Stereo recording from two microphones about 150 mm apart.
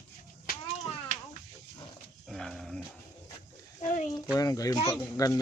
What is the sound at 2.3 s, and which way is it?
Dog, centre (ahead or behind).